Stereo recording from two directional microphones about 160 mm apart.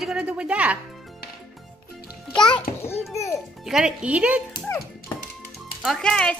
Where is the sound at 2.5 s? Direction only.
15° left (ahead or behind).